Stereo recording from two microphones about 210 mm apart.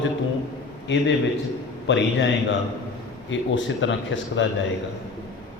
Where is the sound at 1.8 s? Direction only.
60° left (ahead or behind).